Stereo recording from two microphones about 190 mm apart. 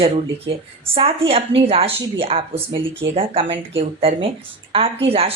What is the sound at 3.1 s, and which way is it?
Speech, 30° right (ahead or behind).